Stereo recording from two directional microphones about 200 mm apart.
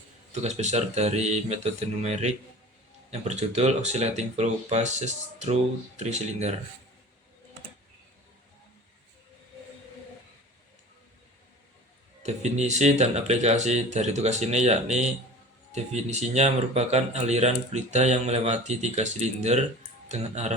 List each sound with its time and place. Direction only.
0.4 s speech: 35° right (ahead or behind)
12.2 s speech: 35° right (ahead or behind)